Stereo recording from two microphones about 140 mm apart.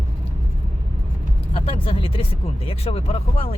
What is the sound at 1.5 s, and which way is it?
Speech, 40° left (ahead or behind).